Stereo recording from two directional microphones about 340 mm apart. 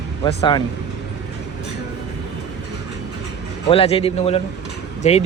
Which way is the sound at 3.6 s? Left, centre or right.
Centre.